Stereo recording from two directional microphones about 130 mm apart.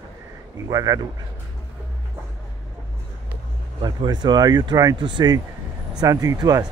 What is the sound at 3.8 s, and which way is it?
Speech, 30° right (ahead or behind).